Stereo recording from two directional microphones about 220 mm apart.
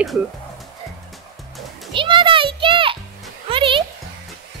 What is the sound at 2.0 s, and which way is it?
Music, 20° right (ahead or behind).